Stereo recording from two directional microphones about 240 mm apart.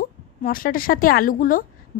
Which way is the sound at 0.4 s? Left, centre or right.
Left.